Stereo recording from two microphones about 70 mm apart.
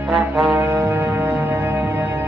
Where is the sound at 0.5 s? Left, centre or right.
Right.